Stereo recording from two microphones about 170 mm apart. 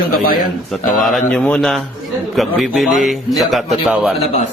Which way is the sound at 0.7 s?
Centre (ahead or behind).